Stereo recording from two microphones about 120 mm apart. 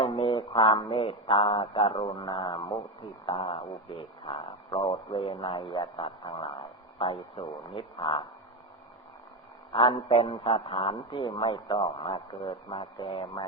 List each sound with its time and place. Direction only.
0.0 s speech: 45° left (ahead or behind)
2.2 s speech: 40° left (ahead or behind)
3.2 s speech: 50° left (ahead or behind)
9.7 s speech: 45° left (ahead or behind)